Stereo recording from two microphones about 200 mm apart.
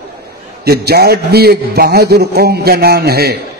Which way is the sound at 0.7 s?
50° right (ahead or behind).